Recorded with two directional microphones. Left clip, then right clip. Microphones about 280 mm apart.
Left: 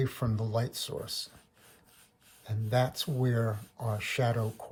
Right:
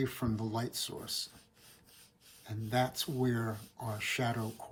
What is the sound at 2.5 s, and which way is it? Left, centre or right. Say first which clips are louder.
Speech: left 3 dB; left.